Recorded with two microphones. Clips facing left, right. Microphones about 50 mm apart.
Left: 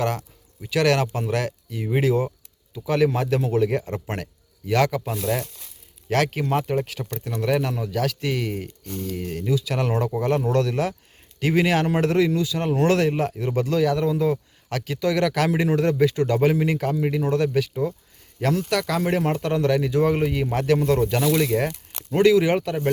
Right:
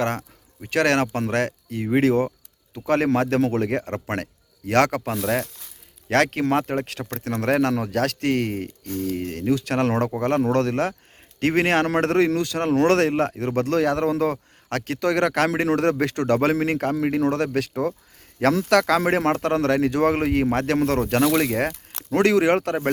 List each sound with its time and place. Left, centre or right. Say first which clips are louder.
0.0 s a man's voice: even; right
7.7 s a man's voice: right 3 dB; right
18.3 s a man's voice: right 5 dB; right
19.4 s a man's voice: right 1 dB; right